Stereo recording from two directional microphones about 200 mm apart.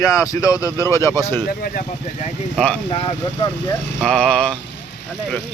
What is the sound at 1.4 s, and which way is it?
Speech, 45° left (ahead or behind).